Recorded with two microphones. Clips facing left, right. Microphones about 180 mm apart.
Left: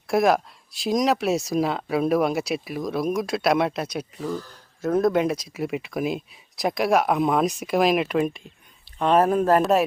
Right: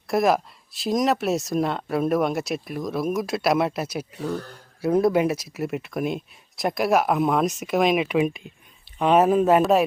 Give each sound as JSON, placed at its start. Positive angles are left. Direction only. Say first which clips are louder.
{"t": 0.1, "sound": "speech", "louder": "left 1 dB", "side_deg": 0}
{"t": 4.1, "sound": "speech", "louder": "right 1 dB", "side_deg": -65}
{"t": 4.8, "sound": "speech", "louder": "right 1 dB", "side_deg": -10}